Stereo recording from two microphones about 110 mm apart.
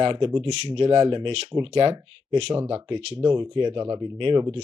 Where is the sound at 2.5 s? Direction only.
40° right (ahead or behind).